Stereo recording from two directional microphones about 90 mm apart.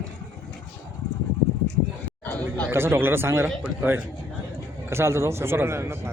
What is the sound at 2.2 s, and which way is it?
Chatter, 20° left (ahead or behind).